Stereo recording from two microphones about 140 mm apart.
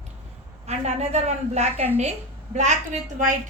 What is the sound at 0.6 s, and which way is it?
A woman's voice, 50° right (ahead or behind).